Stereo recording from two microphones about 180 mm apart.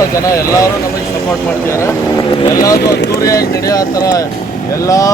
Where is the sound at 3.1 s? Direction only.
20° left (ahead or behind).